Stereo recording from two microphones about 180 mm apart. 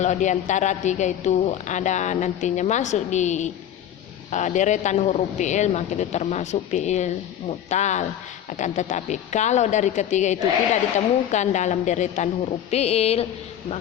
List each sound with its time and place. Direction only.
0.0 s a woman's voice: 40° left (ahead or behind)